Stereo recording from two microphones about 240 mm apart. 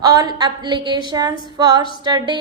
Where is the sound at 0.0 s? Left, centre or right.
Centre.